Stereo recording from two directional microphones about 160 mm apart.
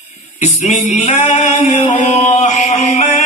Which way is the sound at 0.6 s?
45° left (ahead or behind).